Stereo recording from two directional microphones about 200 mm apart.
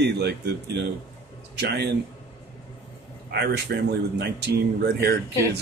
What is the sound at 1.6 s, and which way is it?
Speech, 55° right (ahead or behind).